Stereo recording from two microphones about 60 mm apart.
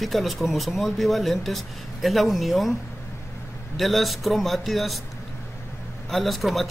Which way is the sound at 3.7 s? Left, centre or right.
Centre.